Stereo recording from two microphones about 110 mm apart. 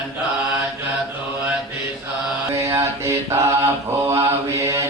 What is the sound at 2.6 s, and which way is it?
Mantra, 25° right (ahead or behind).